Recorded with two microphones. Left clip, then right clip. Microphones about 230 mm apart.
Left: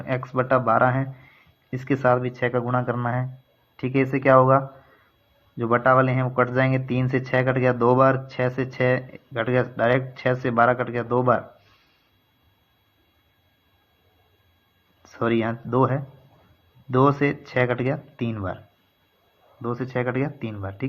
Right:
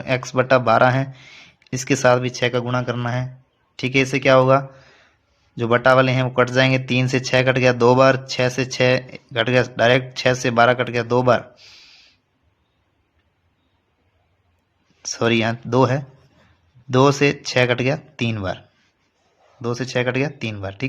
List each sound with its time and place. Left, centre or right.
0.0 s speech: right
15.0 s speech: right
19.6 s speech: right